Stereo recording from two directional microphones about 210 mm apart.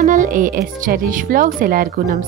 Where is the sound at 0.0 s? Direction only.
35° right (ahead or behind).